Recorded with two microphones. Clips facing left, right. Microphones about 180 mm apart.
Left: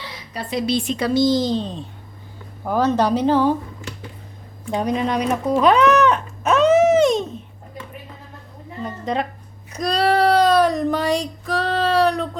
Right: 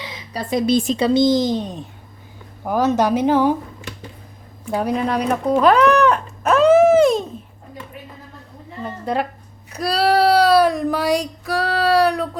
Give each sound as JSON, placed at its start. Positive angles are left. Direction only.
{"t": 0.3, "sound": "speech", "side_deg": -45}
{"t": 0.9, "sound": "speech", "side_deg": -25}
{"t": 4.7, "sound": "speech", "side_deg": -5}
{"t": 6.1, "sound": "dog", "side_deg": -5}
{"t": 9.7, "sound": "a sound", "side_deg": -10}